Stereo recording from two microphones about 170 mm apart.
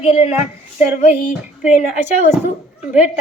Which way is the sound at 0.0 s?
40° left (ahead or behind).